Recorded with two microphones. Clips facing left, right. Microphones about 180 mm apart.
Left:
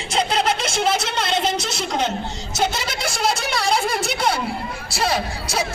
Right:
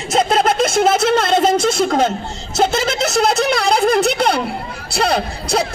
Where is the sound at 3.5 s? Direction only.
60° right (ahead or behind).